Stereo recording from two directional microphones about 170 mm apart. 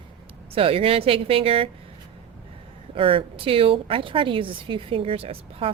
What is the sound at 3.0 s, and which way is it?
A woman's voice, 30° right (ahead or behind).